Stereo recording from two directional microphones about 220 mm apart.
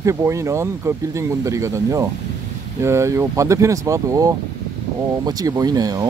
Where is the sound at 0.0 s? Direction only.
15° right (ahead or behind).